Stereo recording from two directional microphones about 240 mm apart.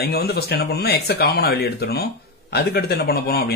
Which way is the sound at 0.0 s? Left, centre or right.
Left.